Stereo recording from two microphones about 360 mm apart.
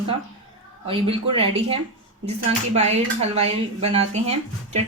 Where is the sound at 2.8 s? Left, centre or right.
Centre.